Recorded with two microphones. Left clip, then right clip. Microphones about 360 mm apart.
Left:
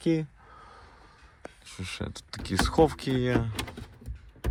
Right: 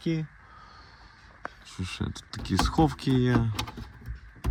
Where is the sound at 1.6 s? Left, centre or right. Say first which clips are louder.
Left 2 dB; centre.